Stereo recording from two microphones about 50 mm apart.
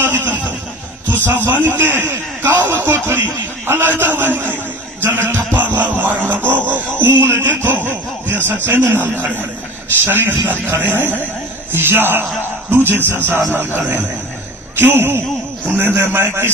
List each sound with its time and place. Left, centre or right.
0.0 s a sound: right
1.0 s a man's voice: right
5.1 s music: right
7.0 s music: right
7.4 s snicker: right
8.6 s a man's voice: right